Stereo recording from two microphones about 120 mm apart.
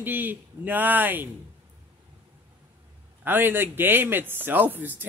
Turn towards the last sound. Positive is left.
turn(degrees=-15)  # may be behind; listen again after turning